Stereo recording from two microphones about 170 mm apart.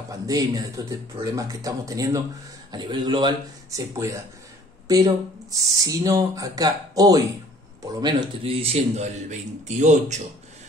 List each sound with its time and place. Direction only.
0.1 s speech: 20° right (ahead or behind); by 10.2 s 45° right (ahead or behind)